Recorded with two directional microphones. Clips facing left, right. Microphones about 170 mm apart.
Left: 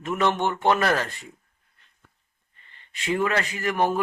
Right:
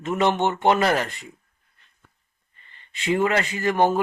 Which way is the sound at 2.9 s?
25° right (ahead or behind).